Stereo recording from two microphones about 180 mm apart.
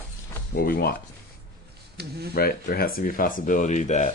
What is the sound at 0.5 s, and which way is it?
Speech, 55° left (ahead or behind).